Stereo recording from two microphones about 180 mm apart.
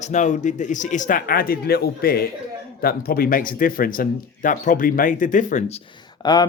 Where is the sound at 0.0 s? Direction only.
40° left (ahead or behind).